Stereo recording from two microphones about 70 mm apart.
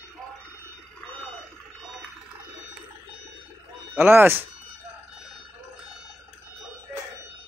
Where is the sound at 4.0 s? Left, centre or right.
Right.